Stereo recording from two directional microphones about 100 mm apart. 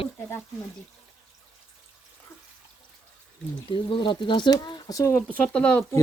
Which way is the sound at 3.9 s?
55° left (ahead or behind).